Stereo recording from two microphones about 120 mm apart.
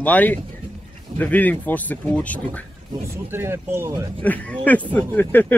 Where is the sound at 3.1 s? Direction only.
20° right (ahead or behind).